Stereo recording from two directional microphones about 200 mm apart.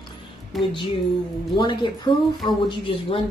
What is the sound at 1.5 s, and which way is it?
A woman's voice, 25° left (ahead or behind).